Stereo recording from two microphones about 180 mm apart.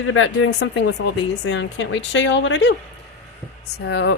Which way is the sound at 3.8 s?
75° left (ahead or behind).